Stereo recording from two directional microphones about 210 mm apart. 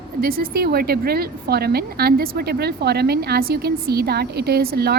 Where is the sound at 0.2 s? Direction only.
45° right (ahead or behind).